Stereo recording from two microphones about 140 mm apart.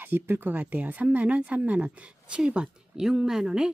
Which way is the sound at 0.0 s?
15° right (ahead or behind).